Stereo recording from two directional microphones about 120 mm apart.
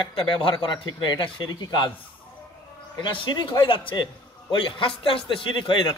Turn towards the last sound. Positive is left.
turn(degrees=40)  # may be behind; listen again after turning